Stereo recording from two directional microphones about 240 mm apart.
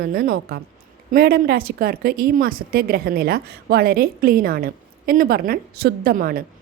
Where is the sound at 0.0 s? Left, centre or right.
Right.